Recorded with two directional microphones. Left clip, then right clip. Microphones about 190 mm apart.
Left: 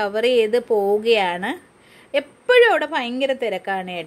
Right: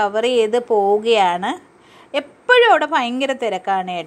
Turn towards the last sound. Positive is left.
turn(degrees=5)  # may be behind; listen again after turning